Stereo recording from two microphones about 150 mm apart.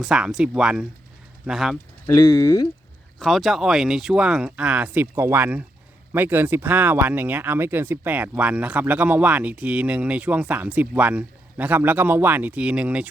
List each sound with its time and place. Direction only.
0.0 s speech: 5° right (ahead or behind)
2.2 s speech: 25° left (ahead or behind)
3.2 s speech: centre (ahead or behind)